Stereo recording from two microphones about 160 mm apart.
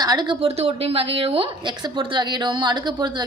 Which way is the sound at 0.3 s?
40° right (ahead or behind).